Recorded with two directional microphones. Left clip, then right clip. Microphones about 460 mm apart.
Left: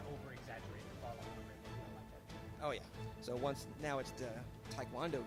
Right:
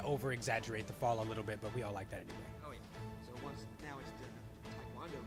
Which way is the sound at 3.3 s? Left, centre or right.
Left.